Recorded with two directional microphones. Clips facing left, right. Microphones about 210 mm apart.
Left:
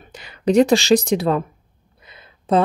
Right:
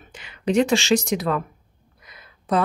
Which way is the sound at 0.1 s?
35° left (ahead or behind).